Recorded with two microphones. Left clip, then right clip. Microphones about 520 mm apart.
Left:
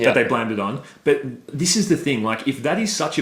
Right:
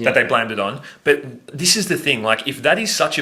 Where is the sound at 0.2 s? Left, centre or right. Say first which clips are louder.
Right 3 dB; right.